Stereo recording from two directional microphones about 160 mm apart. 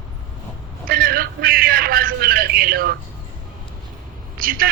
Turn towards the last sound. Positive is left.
turn(degrees=-65)  # may be behind; listen again after turning